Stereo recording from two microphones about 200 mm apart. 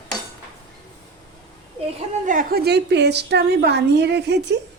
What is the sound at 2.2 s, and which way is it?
A woman's voice, 45° right (ahead or behind).